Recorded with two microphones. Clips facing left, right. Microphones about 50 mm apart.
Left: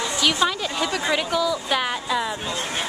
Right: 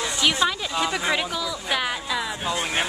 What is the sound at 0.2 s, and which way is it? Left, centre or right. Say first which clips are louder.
Speech: left 1 dB; centre.